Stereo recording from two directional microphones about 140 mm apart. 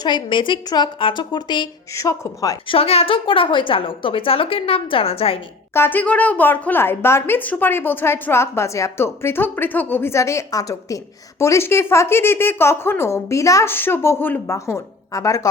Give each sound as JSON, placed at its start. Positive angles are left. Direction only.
{"t": 0.0, "sound": "a woman's voice", "side_deg": 35}
{"t": 2.6, "sound": "a woman's voice", "side_deg": 45}
{"t": 5.7, "sound": "a woman's voice", "side_deg": 15}